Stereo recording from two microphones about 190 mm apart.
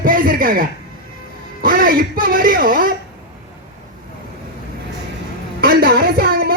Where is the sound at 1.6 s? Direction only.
50° right (ahead or behind).